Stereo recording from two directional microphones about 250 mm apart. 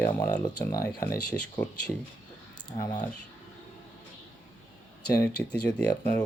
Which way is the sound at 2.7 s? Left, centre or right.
Centre.